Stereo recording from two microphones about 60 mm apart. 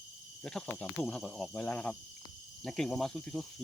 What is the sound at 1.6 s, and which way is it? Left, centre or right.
Speech, left.